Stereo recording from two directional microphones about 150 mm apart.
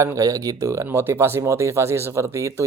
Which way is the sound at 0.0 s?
20° right (ahead or behind).